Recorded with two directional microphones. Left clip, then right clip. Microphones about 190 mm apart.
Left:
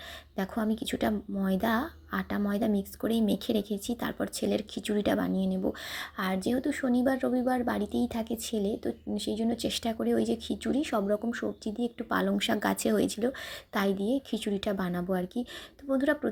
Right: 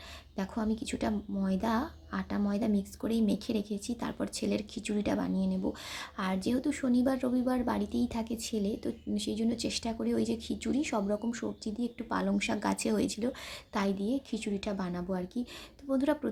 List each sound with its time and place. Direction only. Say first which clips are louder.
0.3 s speech: left 3 dB; 15° left (ahead or behind)